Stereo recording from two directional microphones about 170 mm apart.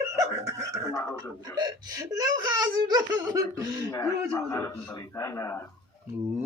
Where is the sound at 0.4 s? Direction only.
20° right (ahead or behind).